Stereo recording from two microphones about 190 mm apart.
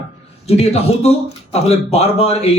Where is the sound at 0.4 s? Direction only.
35° left (ahead or behind).